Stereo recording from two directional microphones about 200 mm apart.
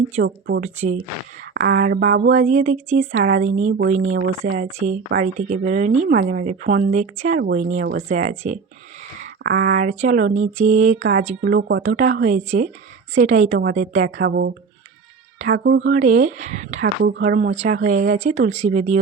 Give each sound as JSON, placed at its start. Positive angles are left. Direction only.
{"t": 0.3, "sound": "speech", "side_deg": -60}
{"t": 0.6, "sound": "speech", "side_deg": -35}
{"t": 1.5, "sound": "speech", "side_deg": -50}
{"t": 2.3, "sound": "speech", "side_deg": -35}
{"t": 9.4, "sound": "speech", "side_deg": -50}
{"t": 14.2, "sound": "speech", "side_deg": -55}
{"t": 16.0, "sound": "speech", "side_deg": -35}
{"t": 17.0, "sound": "speech", "side_deg": -50}